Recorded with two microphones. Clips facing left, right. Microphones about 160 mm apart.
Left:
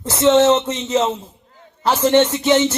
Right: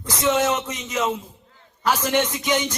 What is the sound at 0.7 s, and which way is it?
A man's voice, 10° right (ahead or behind).